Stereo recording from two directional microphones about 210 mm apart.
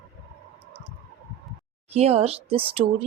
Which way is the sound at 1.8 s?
30° right (ahead or behind).